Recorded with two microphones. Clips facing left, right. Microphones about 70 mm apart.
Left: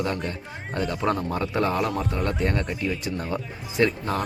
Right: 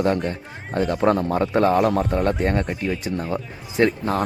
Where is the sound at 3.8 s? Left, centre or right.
Right.